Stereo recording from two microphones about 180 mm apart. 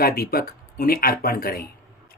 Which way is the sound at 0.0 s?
55° left (ahead or behind).